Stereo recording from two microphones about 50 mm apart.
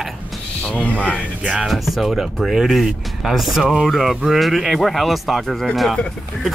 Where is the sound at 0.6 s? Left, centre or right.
Left.